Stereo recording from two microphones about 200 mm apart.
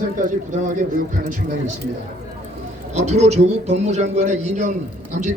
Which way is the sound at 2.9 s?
35° right (ahead or behind).